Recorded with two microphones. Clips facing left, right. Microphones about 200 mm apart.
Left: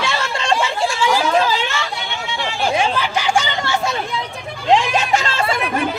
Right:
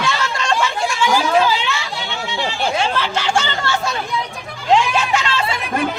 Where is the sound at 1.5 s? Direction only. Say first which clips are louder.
Even; 45° left (ahead or behind).